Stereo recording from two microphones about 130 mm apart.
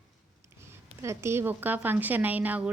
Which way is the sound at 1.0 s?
20° right (ahead or behind).